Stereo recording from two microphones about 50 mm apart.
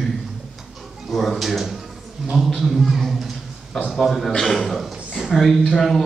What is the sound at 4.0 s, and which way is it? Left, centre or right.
A man's voice, centre.